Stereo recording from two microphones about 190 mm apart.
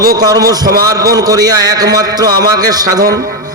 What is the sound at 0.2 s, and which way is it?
A man's voice, 20° right (ahead or behind).